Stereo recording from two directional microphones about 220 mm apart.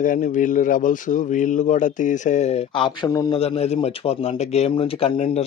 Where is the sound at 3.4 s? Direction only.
25° left (ahead or behind).